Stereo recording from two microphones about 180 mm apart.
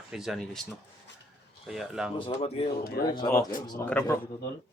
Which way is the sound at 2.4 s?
30° left (ahead or behind).